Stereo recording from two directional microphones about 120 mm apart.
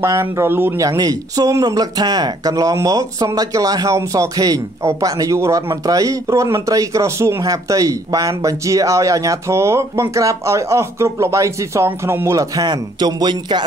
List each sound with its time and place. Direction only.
0.0 s speech: 25° right (ahead or behind); by 13.7 s 40° right (ahead or behind)